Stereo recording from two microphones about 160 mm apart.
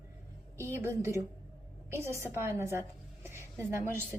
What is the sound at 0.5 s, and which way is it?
A woman's voice, 15° right (ahead or behind).